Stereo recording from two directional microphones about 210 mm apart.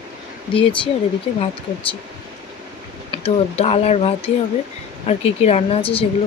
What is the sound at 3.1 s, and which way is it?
Speech, 30° left (ahead or behind).